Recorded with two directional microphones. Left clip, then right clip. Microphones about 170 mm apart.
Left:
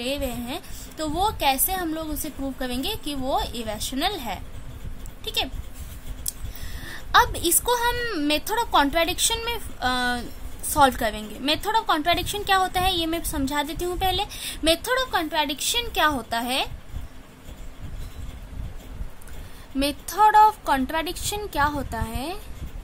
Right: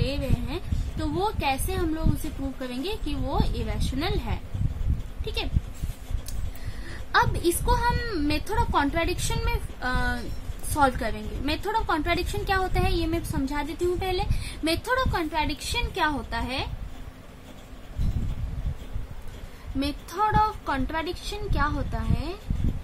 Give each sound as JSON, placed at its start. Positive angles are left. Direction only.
{"t": 0.0, "sound": "a woman's voice", "side_deg": 55}
{"t": 6.9, "sound": "a woman's voice", "side_deg": 55}
{"t": 19.8, "sound": "speech", "side_deg": 60}